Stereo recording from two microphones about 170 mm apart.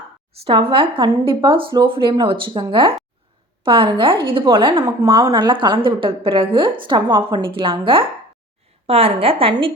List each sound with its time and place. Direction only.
0.4 s a woman's voice: 30° right (ahead or behind)